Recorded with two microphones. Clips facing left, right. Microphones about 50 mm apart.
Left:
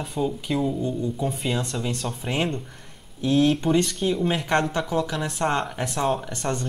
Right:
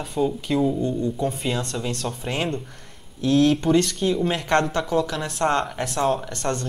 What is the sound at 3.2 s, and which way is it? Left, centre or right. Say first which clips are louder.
Speech: right 2 dB; centre.